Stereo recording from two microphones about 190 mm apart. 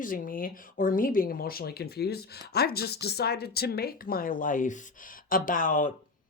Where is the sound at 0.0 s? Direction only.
45° left (ahead or behind).